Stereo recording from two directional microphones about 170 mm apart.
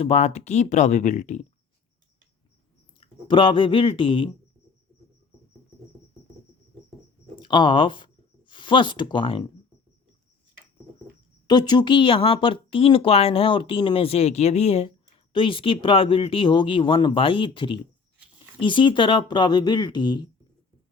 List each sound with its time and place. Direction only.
0.0 s speech: 40° left (ahead or behind)
3.0 s speech: 30° left (ahead or behind)
7.3 s speech: 25° left (ahead or behind)
11.4 s speech: 25° left (ahead or behind)